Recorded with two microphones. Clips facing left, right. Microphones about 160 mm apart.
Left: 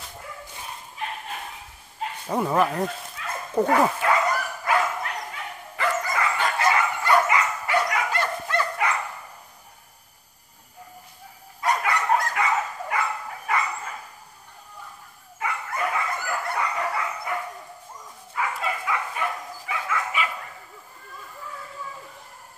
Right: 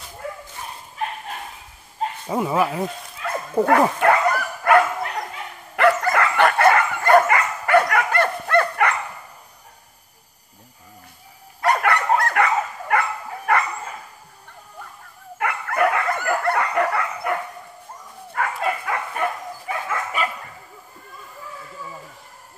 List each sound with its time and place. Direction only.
2.2 s speech: 5° right (ahead or behind)
4.0 s dog: 60° right (ahead or behind)
11.6 s dog: 60° right (ahead or behind)
13.5 s bow-wow: 60° right (ahead or behind)
15.3 s dog: 65° right (ahead or behind); by 20.2 s 45° right (ahead or behind)